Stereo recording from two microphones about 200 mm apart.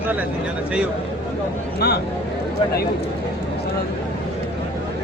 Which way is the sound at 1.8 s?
55° left (ahead or behind).